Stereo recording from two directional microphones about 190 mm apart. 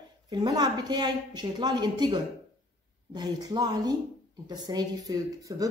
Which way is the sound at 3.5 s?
20° right (ahead or behind).